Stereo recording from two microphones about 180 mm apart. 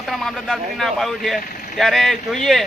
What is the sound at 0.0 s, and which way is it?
Speech, centre (ahead or behind).